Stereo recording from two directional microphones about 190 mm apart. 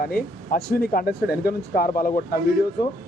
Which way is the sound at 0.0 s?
50° left (ahead or behind).